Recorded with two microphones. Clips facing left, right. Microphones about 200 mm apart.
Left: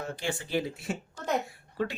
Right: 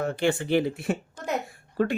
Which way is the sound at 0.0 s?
65° right (ahead or behind).